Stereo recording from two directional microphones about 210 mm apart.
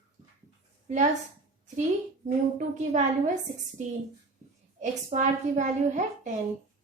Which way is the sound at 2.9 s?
35° right (ahead or behind).